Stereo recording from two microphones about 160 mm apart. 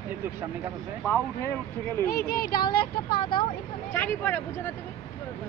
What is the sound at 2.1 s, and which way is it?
Speech, 65° left (ahead or behind).